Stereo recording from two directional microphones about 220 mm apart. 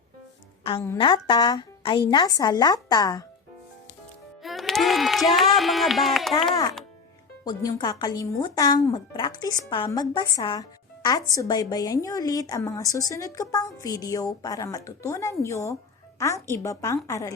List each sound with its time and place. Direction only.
0.9 s a woman's voice: 20° left (ahead or behind)
4.4 s a sound: centre (ahead or behind)
7.4 s speech: 15° left (ahead or behind)